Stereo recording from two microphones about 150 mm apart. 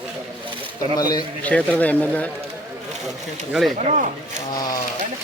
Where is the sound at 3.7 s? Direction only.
55° right (ahead or behind).